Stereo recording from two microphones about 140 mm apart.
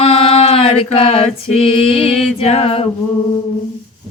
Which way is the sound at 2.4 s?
45° left (ahead or behind).